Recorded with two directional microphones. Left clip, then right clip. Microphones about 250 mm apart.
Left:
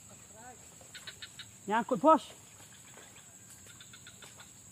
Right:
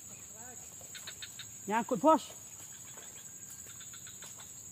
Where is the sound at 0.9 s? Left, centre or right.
Left.